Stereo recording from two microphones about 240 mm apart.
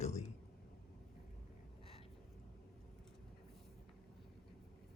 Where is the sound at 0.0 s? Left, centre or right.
Left.